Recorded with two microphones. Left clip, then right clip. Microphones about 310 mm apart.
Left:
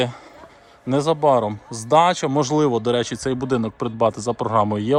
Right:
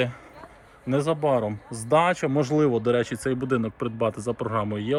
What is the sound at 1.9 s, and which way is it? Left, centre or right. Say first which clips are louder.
Speech: left 5 dB; centre.